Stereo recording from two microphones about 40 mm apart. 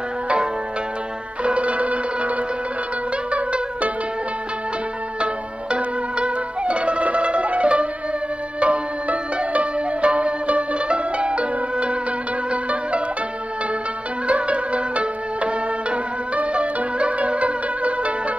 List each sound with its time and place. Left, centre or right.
1.4 s music: right
5.2 s music: right
12.4 s zither: right
14.2 s music: right